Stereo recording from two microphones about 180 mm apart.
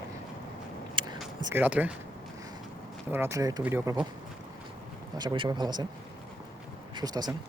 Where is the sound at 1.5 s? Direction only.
10° right (ahead or behind).